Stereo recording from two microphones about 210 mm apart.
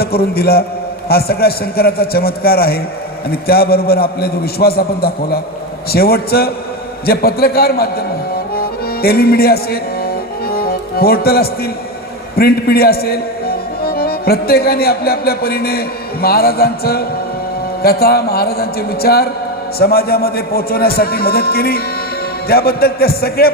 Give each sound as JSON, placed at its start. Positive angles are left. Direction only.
{"t": 0.0, "sound": "a man's voice", "side_deg": 45}
{"t": 8.5, "sound": "accordion", "side_deg": 45}
{"t": 10.5, "sound": "music", "side_deg": 45}
{"t": 12.4, "sound": "a man's voice", "side_deg": 50}